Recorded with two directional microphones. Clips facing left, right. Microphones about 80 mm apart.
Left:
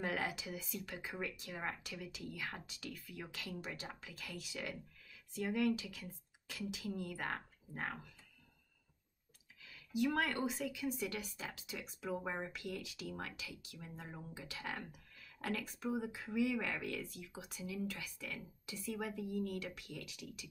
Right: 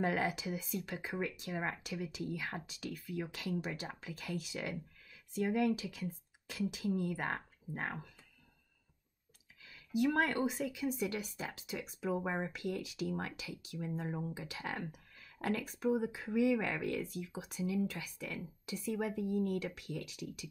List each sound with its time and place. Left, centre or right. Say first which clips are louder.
0.0 s speech: right 5 dB; right
9.9 s speech: right 4 dB; right